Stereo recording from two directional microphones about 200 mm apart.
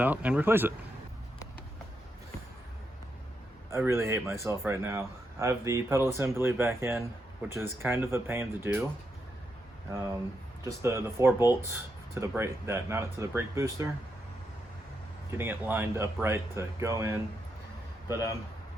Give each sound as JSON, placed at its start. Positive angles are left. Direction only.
{"t": 0.0, "sound": "speech", "side_deg": -5}
{"t": 3.7, "sound": "speech", "side_deg": -15}
{"t": 10.6, "sound": "speech", "side_deg": -15}
{"t": 15.3, "sound": "speech", "side_deg": -10}